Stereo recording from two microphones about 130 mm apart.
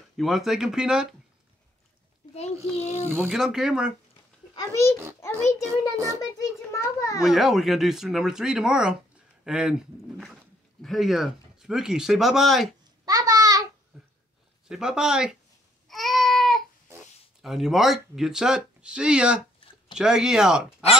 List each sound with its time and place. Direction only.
0.2 s speech: centre (ahead or behind)
2.3 s a child's voice: 55° left (ahead or behind)
3.3 s speech: centre (ahead or behind)
5.7 s a child's voice: 25° right (ahead or behind)
6.3 s a child's voice: 25° left (ahead or behind)
7.2 s speech: centre (ahead or behind)
13.0 s babbling: 30° right (ahead or behind)
13.9 s a sound: 5° right (ahead or behind)
14.7 s speech: 5° right (ahead or behind)
15.9 s a sound: centre (ahead or behind)
17.4 s speech: 5° right (ahead or behind)